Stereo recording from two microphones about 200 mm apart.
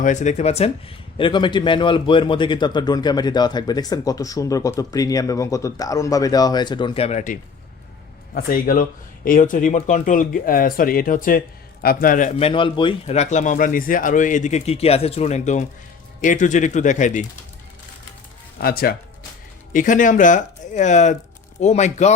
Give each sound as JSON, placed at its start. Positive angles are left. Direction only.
{"t": 0.0, "sound": "speech", "side_deg": 40}
{"t": 12.5, "sound": "speech", "side_deg": 25}
{"t": 18.6, "sound": "speech", "side_deg": 50}